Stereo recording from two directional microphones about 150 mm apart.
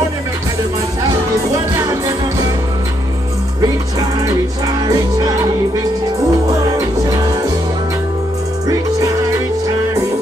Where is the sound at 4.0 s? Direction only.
25° right (ahead or behind).